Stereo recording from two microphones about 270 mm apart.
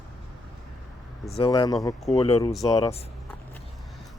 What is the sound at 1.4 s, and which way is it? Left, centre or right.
Speech, centre.